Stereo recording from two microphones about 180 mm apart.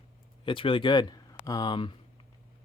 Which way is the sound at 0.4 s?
30° left (ahead or behind).